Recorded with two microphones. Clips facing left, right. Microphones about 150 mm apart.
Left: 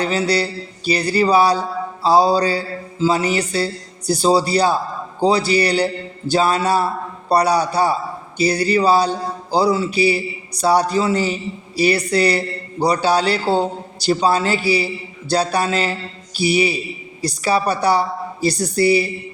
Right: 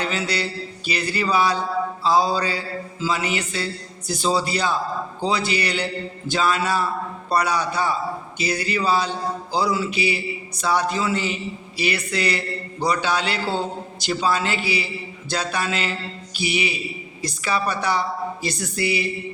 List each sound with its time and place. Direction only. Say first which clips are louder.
0.0 s speech: left 6 dB; 35° left (ahead or behind)